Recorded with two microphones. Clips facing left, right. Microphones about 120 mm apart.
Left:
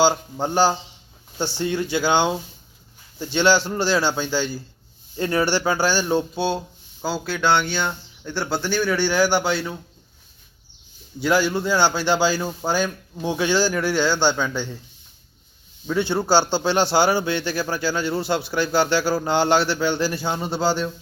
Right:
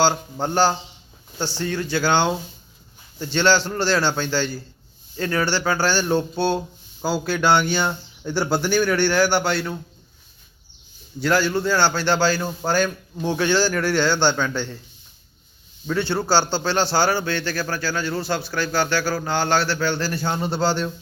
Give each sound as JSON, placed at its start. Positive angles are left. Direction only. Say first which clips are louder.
{"t": 0.0, "sound": "a man's voice", "louder": "left 1 dB", "side_deg": 10}
{"t": 5.1, "sound": "a man's voice", "louder": "left 2 dB", "side_deg": 20}
{"t": 7.0, "sound": "speech", "louder": "right 2 dB", "side_deg": -5}
{"t": 11.2, "sound": "a man's voice", "louder": "even", "side_deg": 15}
{"t": 15.9, "sound": "a man's voice", "louder": "left 1 dB", "side_deg": 15}